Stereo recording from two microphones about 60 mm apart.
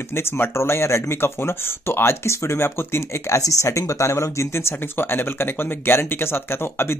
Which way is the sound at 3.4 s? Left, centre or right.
Left.